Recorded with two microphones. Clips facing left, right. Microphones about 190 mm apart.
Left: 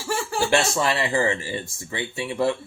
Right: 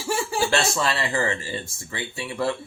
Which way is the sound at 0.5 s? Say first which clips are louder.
Left 5 dB; 20° left (ahead or behind).